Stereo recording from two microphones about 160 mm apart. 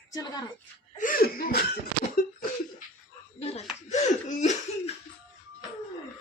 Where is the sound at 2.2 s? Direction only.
60° left (ahead or behind).